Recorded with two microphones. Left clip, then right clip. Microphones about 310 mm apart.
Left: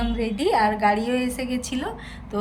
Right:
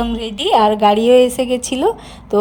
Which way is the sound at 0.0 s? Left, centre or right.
Right.